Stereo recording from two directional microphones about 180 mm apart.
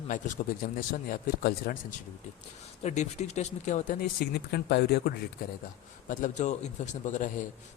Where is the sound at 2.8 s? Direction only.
40° left (ahead or behind).